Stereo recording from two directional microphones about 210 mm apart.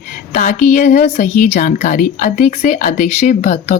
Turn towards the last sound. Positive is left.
turn(degrees=35)  # may be behind; listen again after turning